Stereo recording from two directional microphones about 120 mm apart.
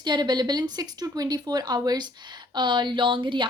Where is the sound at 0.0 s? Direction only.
35° right (ahead or behind).